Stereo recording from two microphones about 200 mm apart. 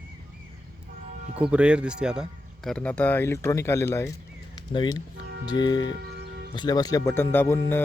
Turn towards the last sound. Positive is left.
turn(degrees=10)  # may be behind; listen again after turning